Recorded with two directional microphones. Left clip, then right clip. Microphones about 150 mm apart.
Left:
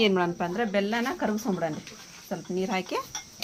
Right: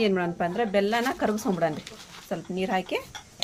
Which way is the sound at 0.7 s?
35° right (ahead or behind).